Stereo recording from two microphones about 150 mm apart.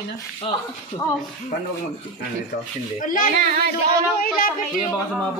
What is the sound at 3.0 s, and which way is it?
A child's voice, 65° left (ahead or behind).